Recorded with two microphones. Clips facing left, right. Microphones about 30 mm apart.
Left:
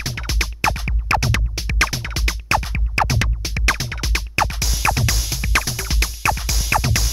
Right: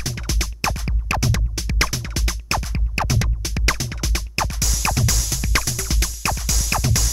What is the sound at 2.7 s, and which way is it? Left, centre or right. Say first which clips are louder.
Music: left 2 dB; left.